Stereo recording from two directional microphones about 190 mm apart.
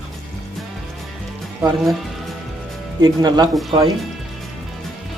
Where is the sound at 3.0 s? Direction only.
20° right (ahead or behind).